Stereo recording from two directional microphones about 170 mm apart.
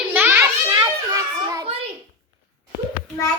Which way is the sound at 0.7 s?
25° right (ahead or behind).